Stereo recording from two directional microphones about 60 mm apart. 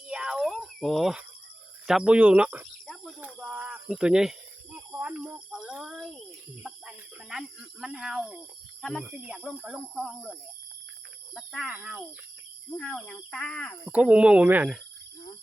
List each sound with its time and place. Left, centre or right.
0.1 s a sound: centre
0.8 s speech: centre
2.0 s speech: right
3.3 s a sound: centre
3.7 s speech: centre
5.5 s cricket: centre
8.8 s speech: centre
9.1 s speech: centre
9.9 s speech: centre
11.3 s speech: centre
12.7 s speech: centre
13.9 s speech: right
14.4 s speech: right